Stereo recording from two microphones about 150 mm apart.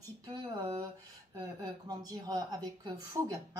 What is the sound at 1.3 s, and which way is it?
A woman's voice, 25° right (ahead or behind).